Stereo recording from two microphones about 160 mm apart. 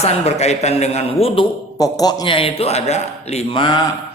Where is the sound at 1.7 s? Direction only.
20° left (ahead or behind).